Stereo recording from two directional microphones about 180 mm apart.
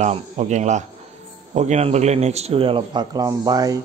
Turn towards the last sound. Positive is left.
turn(degrees=-20)  # may be behind; listen again after turning